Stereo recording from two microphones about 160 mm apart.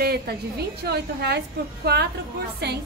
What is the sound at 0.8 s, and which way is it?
A woman's voice, 90° right.